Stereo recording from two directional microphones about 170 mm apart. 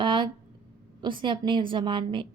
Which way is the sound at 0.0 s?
30° right (ahead or behind).